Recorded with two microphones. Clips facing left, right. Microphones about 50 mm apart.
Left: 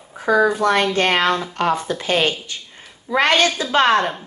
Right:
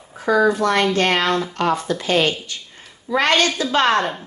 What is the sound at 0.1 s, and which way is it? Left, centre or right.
Speech, centre.